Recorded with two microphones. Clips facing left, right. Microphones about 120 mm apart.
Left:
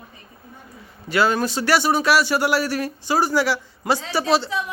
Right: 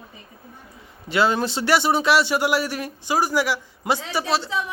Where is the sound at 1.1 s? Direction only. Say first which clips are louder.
Left 1 dB; 20° right (ahead or behind).